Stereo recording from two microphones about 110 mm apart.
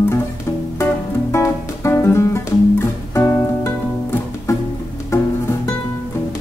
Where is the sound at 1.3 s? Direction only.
25° left (ahead or behind).